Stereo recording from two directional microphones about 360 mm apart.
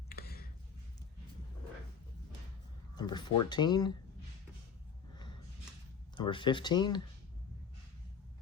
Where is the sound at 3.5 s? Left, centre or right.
Centre.